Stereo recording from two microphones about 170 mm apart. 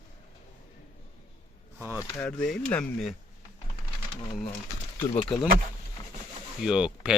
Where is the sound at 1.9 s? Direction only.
10° left (ahead or behind).